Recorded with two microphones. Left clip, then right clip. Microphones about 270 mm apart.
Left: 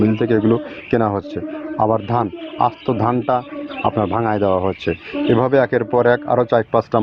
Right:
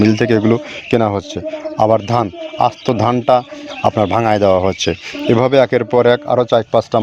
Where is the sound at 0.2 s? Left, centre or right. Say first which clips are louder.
Right 3 dB; right.